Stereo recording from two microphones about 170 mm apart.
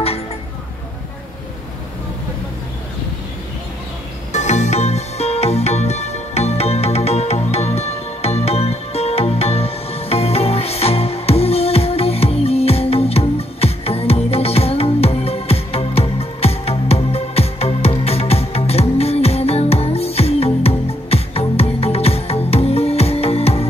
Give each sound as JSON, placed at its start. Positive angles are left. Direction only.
{"t": 4.3, "sound": "music", "side_deg": 45}